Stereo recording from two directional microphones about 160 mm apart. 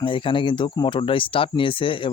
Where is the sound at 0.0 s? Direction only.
30° left (ahead or behind).